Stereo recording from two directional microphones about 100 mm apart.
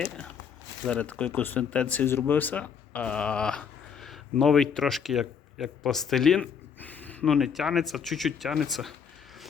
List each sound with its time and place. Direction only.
0.9 s speech: 15° left (ahead or behind)
6.7 s a sound: 15° left (ahead or behind)
7.3 s speech: centre (ahead or behind)